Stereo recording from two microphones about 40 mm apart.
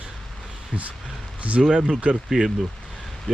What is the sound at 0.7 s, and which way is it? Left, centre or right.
Speech, right.